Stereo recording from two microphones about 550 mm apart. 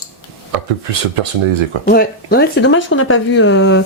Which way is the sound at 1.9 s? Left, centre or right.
Centre.